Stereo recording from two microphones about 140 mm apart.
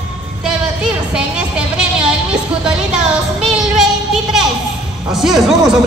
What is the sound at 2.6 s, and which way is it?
Music, 5° right (ahead or behind).